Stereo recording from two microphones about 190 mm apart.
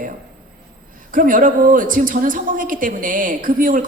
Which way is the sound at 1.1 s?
45° right (ahead or behind).